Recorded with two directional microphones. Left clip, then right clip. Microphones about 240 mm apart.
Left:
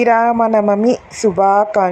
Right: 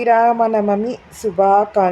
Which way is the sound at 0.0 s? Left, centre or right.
Centre.